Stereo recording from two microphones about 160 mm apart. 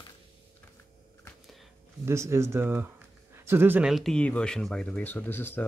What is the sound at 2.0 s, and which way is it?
Speech, 15° right (ahead or behind).